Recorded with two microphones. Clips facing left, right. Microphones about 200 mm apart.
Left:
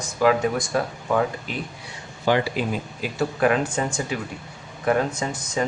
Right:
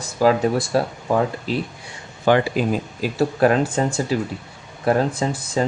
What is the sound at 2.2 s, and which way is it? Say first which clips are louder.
Speech: right 4 dB; 50° right (ahead or behind).